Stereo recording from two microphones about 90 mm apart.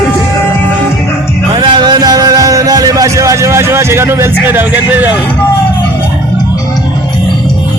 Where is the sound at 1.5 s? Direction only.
60° right (ahead or behind); by 5.1 s 20° right (ahead or behind).